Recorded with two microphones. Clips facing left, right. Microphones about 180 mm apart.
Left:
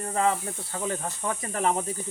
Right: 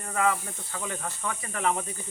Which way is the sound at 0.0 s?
30° left (ahead or behind).